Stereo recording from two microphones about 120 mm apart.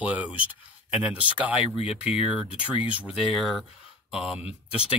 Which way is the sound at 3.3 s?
Centre (ahead or behind).